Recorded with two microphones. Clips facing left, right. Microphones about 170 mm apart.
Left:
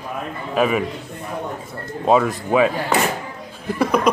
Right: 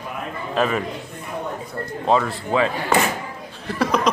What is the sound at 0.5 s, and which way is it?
Speech, 10° left (ahead or behind).